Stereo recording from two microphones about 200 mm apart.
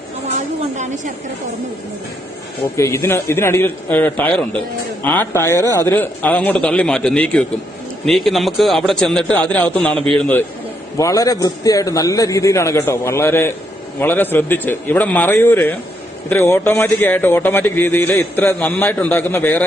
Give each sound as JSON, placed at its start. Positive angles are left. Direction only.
{"t": 0.8, "sound": "a woman's voice", "side_deg": -35}
{"t": 2.7, "sound": "a man's voice", "side_deg": 15}